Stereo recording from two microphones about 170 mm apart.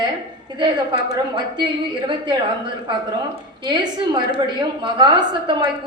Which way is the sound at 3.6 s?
25° right (ahead or behind).